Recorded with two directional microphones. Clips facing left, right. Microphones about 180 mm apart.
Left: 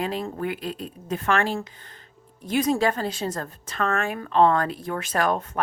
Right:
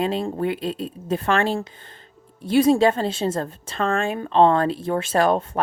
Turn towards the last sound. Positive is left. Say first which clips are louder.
# right 5 dB
turn(degrees=-30)  # may be behind; listen again after turning